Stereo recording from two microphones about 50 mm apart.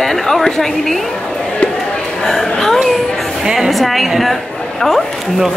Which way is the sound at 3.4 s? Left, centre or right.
Centre.